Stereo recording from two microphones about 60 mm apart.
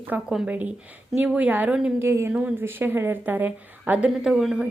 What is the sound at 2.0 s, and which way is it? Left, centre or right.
A woman's voice, right.